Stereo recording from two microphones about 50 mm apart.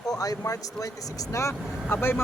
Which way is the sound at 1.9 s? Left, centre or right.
Left.